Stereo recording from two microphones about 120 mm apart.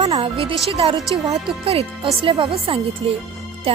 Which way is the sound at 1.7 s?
50° right (ahead or behind).